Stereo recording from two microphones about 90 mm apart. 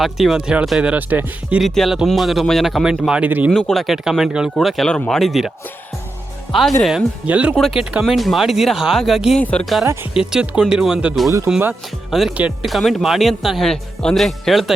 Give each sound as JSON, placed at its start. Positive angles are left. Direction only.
{"t": 0.0, "sound": "speech", "side_deg": -5}
{"t": 1.6, "sound": "a man's voice", "side_deg": 0}
{"t": 3.1, "sound": "speech", "side_deg": -15}
{"t": 3.5, "sound": "a man's voice", "side_deg": 5}
{"t": 4.5, "sound": "a man's voice", "side_deg": 5}
{"t": 6.5, "sound": "speech", "side_deg": 0}
{"t": 7.3, "sound": "a man's voice", "side_deg": -15}
{"t": 9.4, "sound": "speech", "side_deg": 15}
{"t": 10.2, "sound": "a man's voice", "side_deg": -10}